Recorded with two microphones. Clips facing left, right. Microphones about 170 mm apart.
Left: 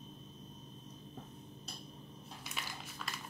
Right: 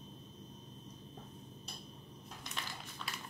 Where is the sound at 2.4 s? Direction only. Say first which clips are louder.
Even; 5° left (ahead or behind).